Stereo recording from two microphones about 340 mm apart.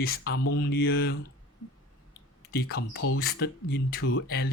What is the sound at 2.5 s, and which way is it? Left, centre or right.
Speech, left.